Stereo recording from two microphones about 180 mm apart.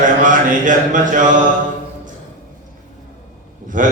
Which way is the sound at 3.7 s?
45° right (ahead or behind).